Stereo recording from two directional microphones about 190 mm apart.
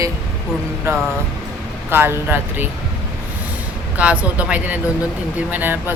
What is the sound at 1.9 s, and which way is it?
Speech, 10° right (ahead or behind).